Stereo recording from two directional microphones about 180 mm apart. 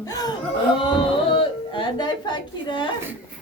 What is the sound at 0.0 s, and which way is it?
Speech, 20° left (ahead or behind).